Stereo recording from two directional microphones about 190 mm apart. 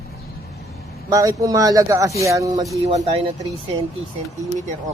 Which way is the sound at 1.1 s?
20° right (ahead or behind).